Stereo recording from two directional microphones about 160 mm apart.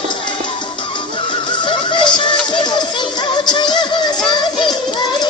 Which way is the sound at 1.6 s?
30° left (ahead or behind).